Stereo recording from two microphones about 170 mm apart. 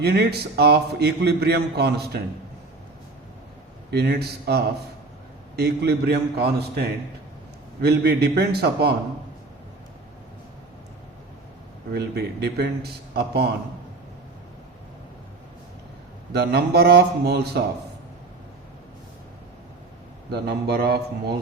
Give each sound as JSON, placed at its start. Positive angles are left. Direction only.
{"t": 0.0, "sound": "a man's voice", "side_deg": -75}
{"t": 3.9, "sound": "a man's voice", "side_deg": -75}
{"t": 11.9, "sound": "a man's voice", "side_deg": -70}
{"t": 16.3, "sound": "a man's voice", "side_deg": -75}
{"t": 20.3, "sound": "a man's voice", "side_deg": -70}